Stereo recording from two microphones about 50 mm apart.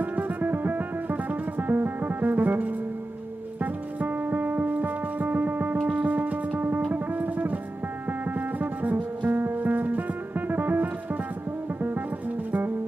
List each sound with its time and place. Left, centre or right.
0.0 s music: right